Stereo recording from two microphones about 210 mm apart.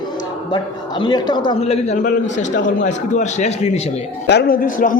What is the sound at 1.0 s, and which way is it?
A man's voice, 20° left (ahead or behind).